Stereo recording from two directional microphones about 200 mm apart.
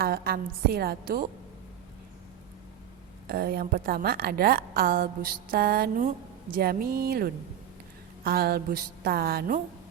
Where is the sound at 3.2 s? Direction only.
50° right (ahead or behind).